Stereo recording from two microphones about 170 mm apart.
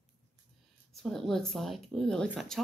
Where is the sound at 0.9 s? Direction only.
Centre (ahead or behind).